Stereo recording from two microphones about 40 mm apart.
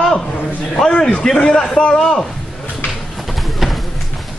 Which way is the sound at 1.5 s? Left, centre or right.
Centre.